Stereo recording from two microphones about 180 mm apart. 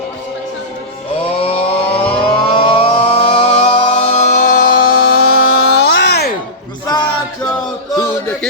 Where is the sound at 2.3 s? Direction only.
30° left (ahead or behind); by 4.7 s 45° left (ahead or behind).